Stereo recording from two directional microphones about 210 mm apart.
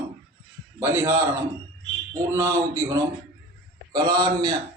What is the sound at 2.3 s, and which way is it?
A man's voice, 15° right (ahead or behind).